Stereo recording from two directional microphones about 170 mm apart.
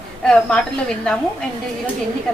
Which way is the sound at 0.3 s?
5° left (ahead or behind).